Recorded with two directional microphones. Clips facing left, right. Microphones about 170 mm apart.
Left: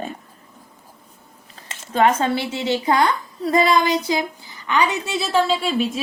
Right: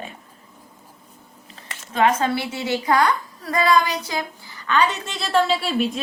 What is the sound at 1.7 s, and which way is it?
A woman's voice, 30° left (ahead or behind).